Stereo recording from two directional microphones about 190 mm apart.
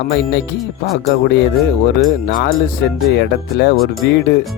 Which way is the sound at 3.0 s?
60° left (ahead or behind).